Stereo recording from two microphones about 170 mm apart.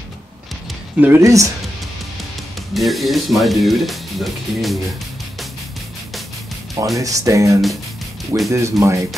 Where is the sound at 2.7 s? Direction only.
Centre (ahead or behind).